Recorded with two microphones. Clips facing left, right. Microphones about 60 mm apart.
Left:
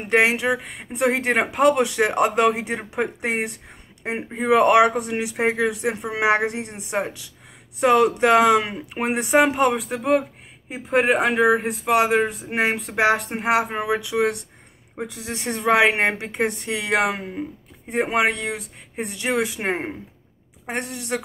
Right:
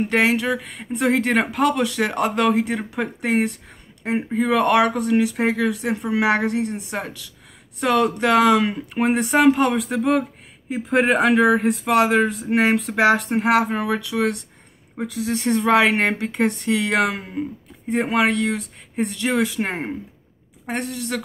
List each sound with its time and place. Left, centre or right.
0.0 s speech: centre
4.4 s speech: left